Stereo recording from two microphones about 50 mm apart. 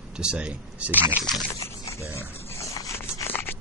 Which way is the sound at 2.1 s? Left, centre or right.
Left.